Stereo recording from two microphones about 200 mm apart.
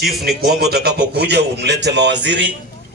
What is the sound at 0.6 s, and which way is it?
A man's voice, 55° right (ahead or behind).